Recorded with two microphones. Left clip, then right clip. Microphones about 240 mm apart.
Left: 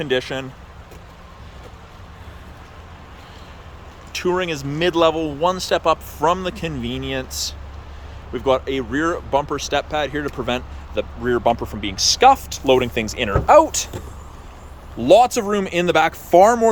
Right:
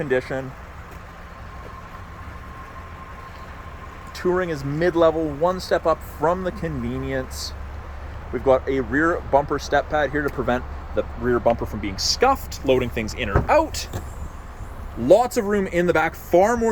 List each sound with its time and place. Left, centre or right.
0.0 s speech: centre
4.4 s speech: centre
6.8 s speech: right
7.1 s speech: centre
15.0 s speech: centre